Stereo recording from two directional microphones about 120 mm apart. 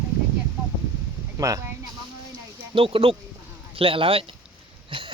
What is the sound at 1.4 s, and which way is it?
Speech, 25° right (ahead or behind).